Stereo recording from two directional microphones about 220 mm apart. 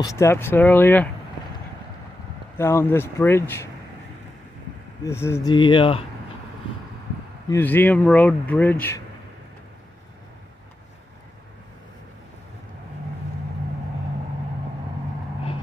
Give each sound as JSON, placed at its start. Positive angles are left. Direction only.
{"t": 0.0, "sound": "speech", "side_deg": 15}
{"t": 2.5, "sound": "speech", "side_deg": 10}
{"t": 5.0, "sound": "speech", "side_deg": 10}
{"t": 7.4, "sound": "speech", "side_deg": 10}